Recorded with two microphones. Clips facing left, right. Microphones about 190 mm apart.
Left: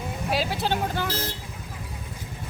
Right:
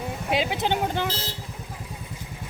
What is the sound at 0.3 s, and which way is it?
Speech, 20° right (ahead or behind).